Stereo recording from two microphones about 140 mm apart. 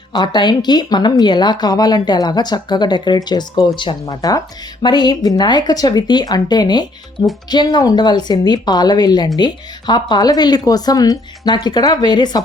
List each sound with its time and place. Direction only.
0.1 s speech: 30° left (ahead or behind)